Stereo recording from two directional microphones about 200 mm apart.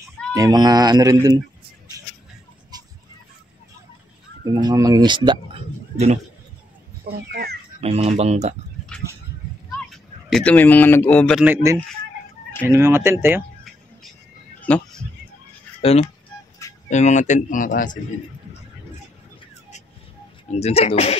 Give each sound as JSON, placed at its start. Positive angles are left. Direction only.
{"t": 0.3, "sound": "speech", "side_deg": -20}
{"t": 2.7, "sound": "fowl", "side_deg": -20}
{"t": 4.6, "sound": "speech", "side_deg": -20}
{"t": 7.1, "sound": "speech", "side_deg": -55}
{"t": 7.8, "sound": "speech", "side_deg": -30}
{"t": 9.8, "sound": "speech", "side_deg": 5}
{"t": 11.4, "sound": "speech", "side_deg": -15}
{"t": 14.6, "sound": "a sound", "side_deg": 5}
{"t": 15.8, "sound": "speech", "side_deg": 30}
{"t": 20.5, "sound": "speech", "side_deg": 30}